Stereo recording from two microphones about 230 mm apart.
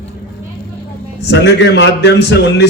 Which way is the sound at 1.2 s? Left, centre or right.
Left.